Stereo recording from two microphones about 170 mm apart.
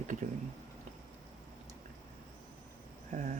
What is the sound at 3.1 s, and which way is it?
Speech, 45° right (ahead or behind).